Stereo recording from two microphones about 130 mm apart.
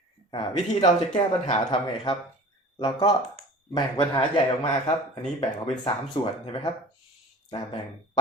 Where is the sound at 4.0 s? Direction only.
45° left (ahead or behind).